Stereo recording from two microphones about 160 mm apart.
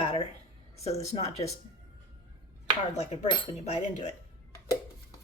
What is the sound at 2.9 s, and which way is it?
Speech, 45° left (ahead or behind).